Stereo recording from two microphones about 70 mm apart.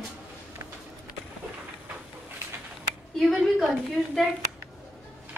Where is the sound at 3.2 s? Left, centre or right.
Centre.